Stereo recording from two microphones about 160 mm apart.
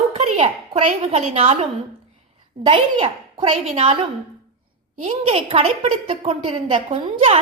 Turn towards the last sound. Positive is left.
turn(degrees=-35)  # may be behind; listen again after turning